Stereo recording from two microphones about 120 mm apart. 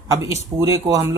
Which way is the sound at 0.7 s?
25° right (ahead or behind).